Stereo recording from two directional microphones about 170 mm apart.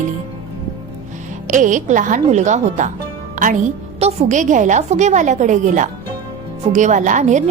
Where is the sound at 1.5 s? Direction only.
50° right (ahead or behind).